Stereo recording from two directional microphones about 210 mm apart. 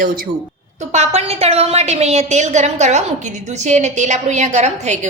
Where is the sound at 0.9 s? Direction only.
30° right (ahead or behind).